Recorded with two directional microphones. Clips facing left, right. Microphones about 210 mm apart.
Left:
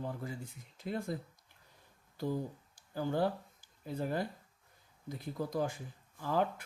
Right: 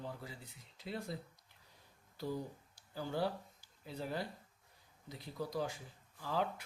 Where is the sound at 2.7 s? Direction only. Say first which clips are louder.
Left 5 dB; 50° left (ahead or behind).